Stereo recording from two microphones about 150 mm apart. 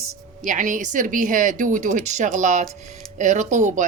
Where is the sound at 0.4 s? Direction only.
55° right (ahead or behind).